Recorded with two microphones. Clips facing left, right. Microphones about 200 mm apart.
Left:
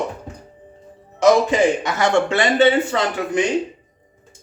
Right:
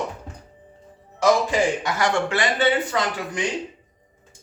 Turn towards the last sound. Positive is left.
turn(degrees=25)  # may be behind; listen again after turning